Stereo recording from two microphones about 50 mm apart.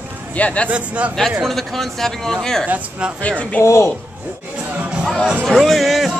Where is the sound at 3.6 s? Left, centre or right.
Left.